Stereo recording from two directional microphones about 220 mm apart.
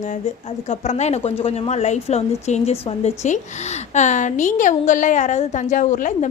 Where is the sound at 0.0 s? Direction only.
35° left (ahead or behind).